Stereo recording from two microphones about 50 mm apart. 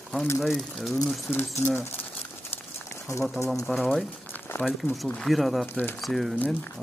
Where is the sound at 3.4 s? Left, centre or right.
Left.